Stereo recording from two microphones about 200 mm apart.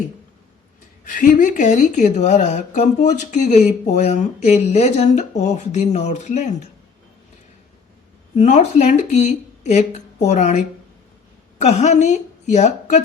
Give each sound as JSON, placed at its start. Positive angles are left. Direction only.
{"t": 1.0, "sound": "speech", "side_deg": 40}
{"t": 8.4, "sound": "speech", "side_deg": 35}
{"t": 11.6, "sound": "a woman's voice", "side_deg": 35}